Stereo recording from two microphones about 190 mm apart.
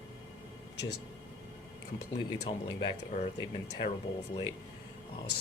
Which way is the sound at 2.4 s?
25° left (ahead or behind).